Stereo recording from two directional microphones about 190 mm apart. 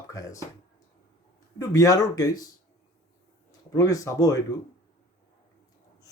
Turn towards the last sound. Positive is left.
turn(degrees=20)  # may be behind; listen again after turning